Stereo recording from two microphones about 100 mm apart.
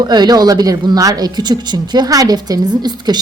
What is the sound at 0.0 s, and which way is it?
A woman's voice, 45° right (ahead or behind).